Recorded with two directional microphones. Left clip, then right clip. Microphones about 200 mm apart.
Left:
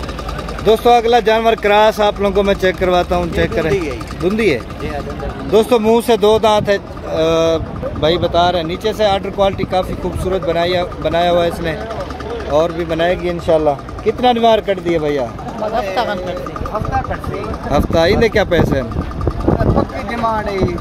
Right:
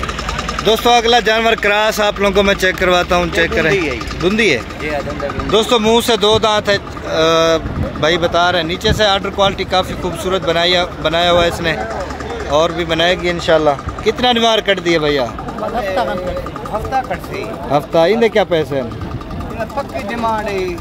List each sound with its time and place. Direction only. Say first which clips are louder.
0.7 s speech: left 1 dB; 5° left (ahead or behind)
15.9 s a sound: right 1 dB; 35° left (ahead or behind)
17.6 s speech: right 1 dB; centre (ahead or behind)